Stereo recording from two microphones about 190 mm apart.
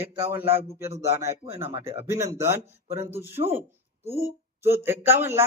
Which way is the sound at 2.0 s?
15° right (ahead or behind).